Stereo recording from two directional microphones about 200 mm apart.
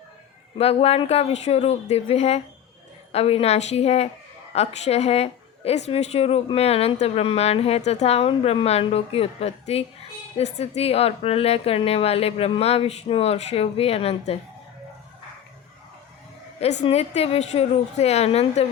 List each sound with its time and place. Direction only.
0.6 s a woman's voice: 30° left (ahead or behind)
16.8 s a woman's voice: 30° left (ahead or behind)